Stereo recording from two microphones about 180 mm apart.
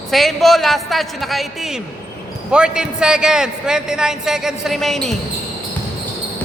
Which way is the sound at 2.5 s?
5° right (ahead or behind).